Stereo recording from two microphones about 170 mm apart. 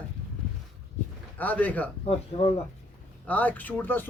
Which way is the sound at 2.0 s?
35° left (ahead or behind).